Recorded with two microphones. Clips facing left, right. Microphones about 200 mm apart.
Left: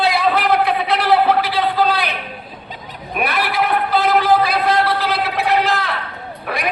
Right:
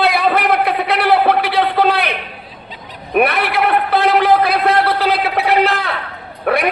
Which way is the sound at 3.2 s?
60° right (ahead or behind).